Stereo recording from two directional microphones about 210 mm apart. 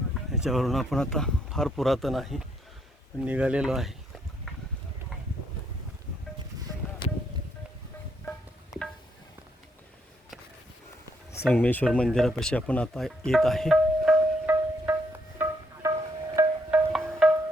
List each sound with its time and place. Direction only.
0.1 s speech: centre (ahead or behind)
7.0 s a sound: 20° left (ahead or behind)
11.4 s speech: 5° left (ahead or behind)
15.4 s music: 15° right (ahead or behind)
16.9 s music: 5° right (ahead or behind)